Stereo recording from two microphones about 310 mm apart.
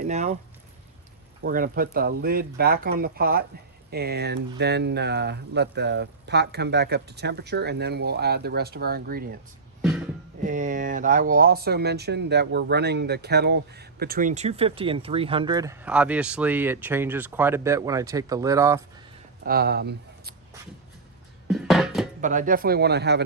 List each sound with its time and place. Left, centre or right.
0.0 s speech: right
1.4 s speech: right
10.4 s speech: right; by 18.8 s centre
19.5 s speech: right
21.4 s music: centre
22.2 s speech: right